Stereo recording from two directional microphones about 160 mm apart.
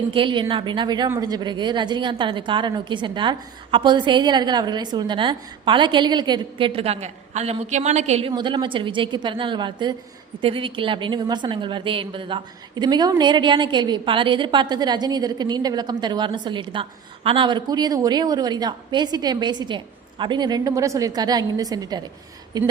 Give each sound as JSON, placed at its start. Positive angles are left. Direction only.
{"t": 0.1, "sound": "a woman's voice", "side_deg": -30}
{"t": 8.3, "sound": "a woman's voice", "side_deg": -30}